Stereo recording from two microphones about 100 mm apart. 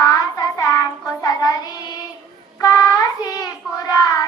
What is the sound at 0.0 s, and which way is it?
Child singing, 35° left (ahead or behind).